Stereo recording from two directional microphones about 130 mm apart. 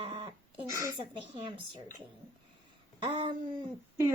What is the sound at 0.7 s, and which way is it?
Speech, 20° right (ahead or behind).